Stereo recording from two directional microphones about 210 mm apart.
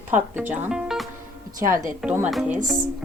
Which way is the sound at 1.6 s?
40° right (ahead or behind).